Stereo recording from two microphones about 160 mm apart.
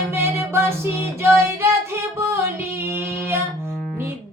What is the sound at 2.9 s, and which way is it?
Female singing, 15° right (ahead or behind).